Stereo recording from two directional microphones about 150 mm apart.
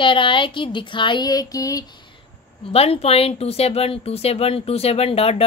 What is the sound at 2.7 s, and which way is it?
A woman's voice, 40° left (ahead or behind).